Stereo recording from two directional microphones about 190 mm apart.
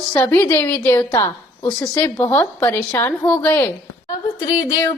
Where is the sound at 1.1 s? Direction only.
25° left (ahead or behind).